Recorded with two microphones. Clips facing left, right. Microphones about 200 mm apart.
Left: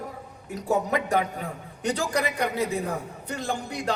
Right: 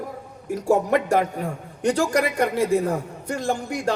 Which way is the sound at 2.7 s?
45° right (ahead or behind).